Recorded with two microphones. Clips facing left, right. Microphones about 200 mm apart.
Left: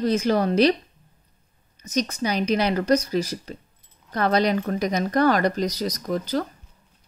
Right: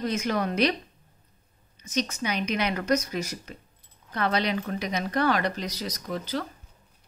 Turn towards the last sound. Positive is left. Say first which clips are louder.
# left 6 dB
turn(degrees=40)  # may be behind; listen again after turning